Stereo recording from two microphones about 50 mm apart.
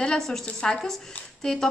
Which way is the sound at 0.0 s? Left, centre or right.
Centre.